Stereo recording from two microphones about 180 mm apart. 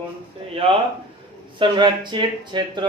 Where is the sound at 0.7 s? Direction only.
30° right (ahead or behind).